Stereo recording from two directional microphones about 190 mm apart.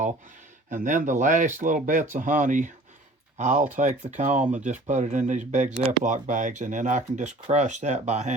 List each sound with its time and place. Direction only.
0.7 s speech: 40° right (ahead or behind)